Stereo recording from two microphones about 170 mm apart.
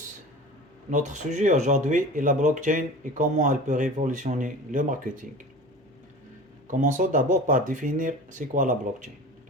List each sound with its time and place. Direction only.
0.9 s speech: 45° right (ahead or behind)
6.7 s speech: 50° right (ahead or behind)